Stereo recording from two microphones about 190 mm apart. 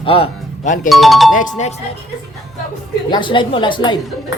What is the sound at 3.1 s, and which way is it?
Speech, 25° left (ahead or behind).